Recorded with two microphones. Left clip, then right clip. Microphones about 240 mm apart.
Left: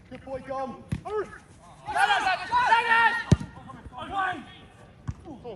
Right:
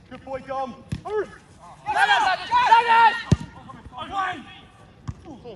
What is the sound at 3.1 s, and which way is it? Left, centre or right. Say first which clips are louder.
Basketball bounce: right 2 dB; centre.